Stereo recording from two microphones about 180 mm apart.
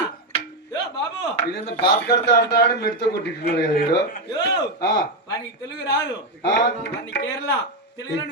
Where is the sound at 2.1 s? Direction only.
65° left (ahead or behind).